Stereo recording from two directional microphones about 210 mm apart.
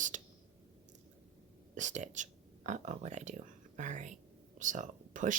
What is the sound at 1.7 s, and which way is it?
A woman's voice, 35° right (ahead or behind).